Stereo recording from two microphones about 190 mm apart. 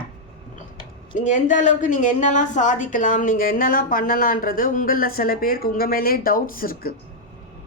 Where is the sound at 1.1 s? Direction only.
40° left (ahead or behind).